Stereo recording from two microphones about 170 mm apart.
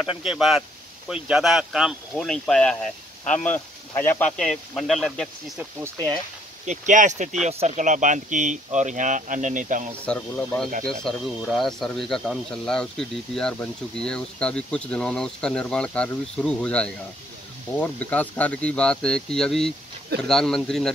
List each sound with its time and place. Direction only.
0.0 s speech: 5° right (ahead or behind)
6.6 s speech: 45° right (ahead or behind)
10.0 s speech: 10° left (ahead or behind)